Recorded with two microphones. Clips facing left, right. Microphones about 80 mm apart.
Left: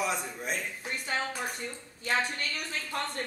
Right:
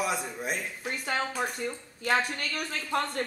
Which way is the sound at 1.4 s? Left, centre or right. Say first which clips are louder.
Right 5 dB; right.